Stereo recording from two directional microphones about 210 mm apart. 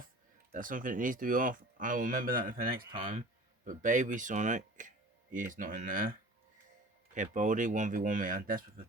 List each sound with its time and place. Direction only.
0.5 s speech: 40° right (ahead or behind)
3.0 s speech: 25° right (ahead or behind); by 8.6 s 40° right (ahead or behind)